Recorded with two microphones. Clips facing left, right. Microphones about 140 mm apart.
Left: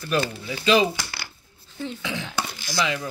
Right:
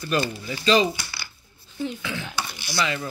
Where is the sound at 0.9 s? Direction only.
90° left.